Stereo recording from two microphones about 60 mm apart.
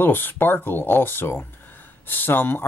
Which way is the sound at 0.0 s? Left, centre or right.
Left.